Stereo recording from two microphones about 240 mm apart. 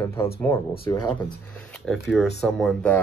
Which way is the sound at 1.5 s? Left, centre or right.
Centre.